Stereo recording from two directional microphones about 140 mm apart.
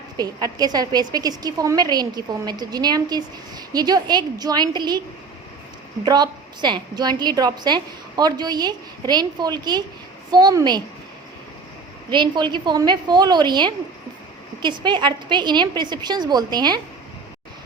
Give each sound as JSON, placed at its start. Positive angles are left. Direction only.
{"t": 0.2, "sound": "a woman's voice", "side_deg": -30}
{"t": 6.1, "sound": "a woman's voice", "side_deg": -30}
{"t": 12.1, "sound": "a woman's voice", "side_deg": -35}